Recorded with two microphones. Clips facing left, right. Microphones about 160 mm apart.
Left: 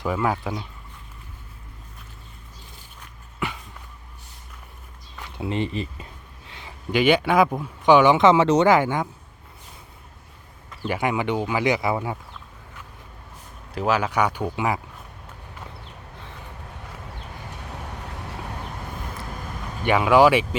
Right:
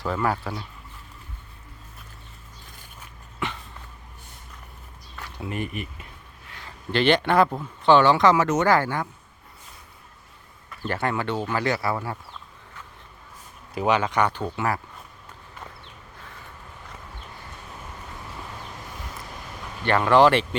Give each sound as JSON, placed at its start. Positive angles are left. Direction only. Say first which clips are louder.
{"t": 0.0, "sound": "speech", "louder": "left 1 dB", "side_deg": 10}
{"t": 5.2, "sound": "speech", "louder": "left 5 dB", "side_deg": 25}
{"t": 6.5, "sound": "speech", "louder": "left 2 dB", "side_deg": 15}
{"t": 10.7, "sound": "speech", "louder": "left 2 dB", "side_deg": 15}
{"t": 13.7, "sound": "speech", "louder": "even", "side_deg": 0}
{"t": 19.8, "sound": "speech", "louder": "left 1 dB", "side_deg": 10}